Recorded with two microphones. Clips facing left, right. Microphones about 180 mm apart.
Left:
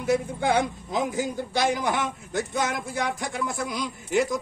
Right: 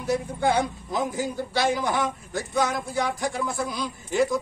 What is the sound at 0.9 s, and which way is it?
A man's voice, 15° left (ahead or behind).